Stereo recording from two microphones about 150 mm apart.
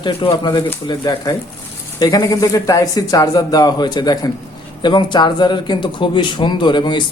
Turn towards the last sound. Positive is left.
turn(degrees=30)  # may be behind; listen again after turning